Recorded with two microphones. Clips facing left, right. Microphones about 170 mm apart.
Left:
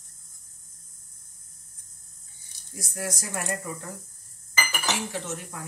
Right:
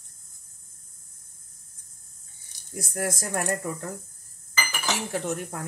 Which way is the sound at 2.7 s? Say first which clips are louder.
Right 4 dB; 55° right (ahead or behind).